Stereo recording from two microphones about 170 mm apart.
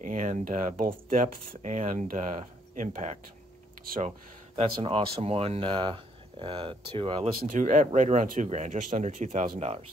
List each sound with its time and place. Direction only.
0.0 s speech: 50° right (ahead or behind)
4.6 s speech: 30° right (ahead or behind)
7.5 s speech: 50° right (ahead or behind)